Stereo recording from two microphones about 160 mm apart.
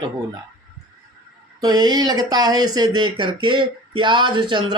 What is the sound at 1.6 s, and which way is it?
Speech, 25° right (ahead or behind).